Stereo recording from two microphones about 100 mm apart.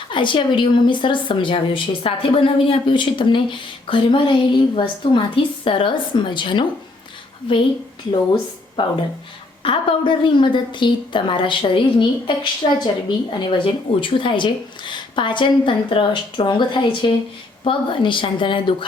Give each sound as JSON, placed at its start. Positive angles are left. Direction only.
{"t": 0.1, "sound": "a woman's voice", "side_deg": 55}
{"t": 8.8, "sound": "a woman's voice", "side_deg": 50}